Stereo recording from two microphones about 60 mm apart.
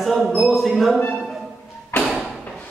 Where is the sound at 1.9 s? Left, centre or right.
Left.